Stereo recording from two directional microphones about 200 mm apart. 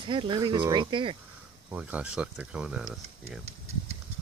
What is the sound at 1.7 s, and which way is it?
Speech, 5° right (ahead or behind).